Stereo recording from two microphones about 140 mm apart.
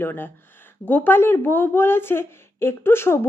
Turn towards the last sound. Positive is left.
turn(degrees=15)  # may be behind; listen again after turning